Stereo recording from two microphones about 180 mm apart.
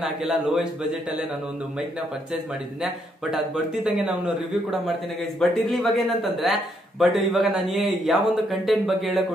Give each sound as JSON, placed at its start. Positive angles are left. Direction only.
{"t": 0.0, "sound": "speech", "side_deg": 0}
{"t": 2.8, "sound": "speech", "side_deg": -5}
{"t": 5.4, "sound": "speech", "side_deg": 0}